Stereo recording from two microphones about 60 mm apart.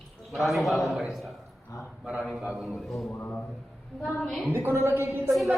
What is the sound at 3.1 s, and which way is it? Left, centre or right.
Speech, left.